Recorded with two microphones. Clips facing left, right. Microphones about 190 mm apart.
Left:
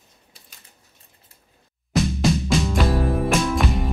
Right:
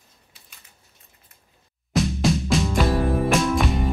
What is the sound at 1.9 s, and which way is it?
Music, centre (ahead or behind).